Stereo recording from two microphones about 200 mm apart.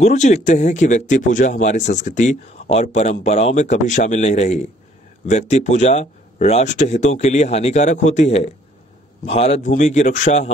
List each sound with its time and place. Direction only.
0.0 s speech: 35° left (ahead or behind)